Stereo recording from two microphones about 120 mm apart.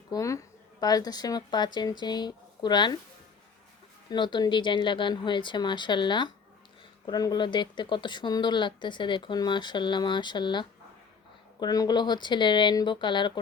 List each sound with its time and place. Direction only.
0.1 s speech: 25° left (ahead or behind)
4.1 s speech: 40° left (ahead or behind)